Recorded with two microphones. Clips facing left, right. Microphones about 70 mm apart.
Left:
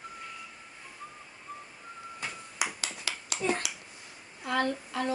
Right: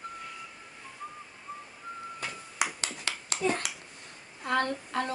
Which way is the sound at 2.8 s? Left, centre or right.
Right.